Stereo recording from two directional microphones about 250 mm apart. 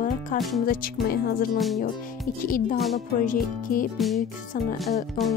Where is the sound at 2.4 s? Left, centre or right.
Left.